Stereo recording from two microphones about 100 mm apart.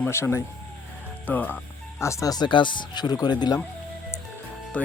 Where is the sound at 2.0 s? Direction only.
30° left (ahead or behind); by 3.6 s 45° left (ahead or behind).